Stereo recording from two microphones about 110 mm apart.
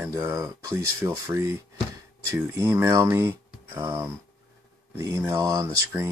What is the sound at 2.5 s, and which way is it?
Speech, 30° right (ahead or behind).